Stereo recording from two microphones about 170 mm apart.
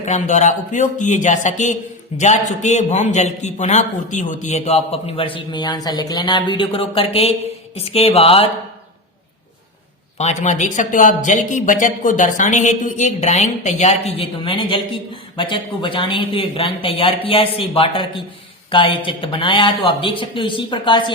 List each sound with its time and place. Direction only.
0.0 s a man's voice: 45° left (ahead or behind)
10.2 s speech: 45° left (ahead or behind)